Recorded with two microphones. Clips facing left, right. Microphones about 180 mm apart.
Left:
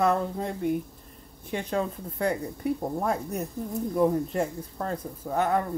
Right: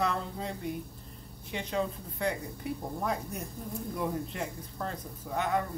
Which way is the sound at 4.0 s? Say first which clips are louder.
Left 11 dB; 45° left (ahead or behind).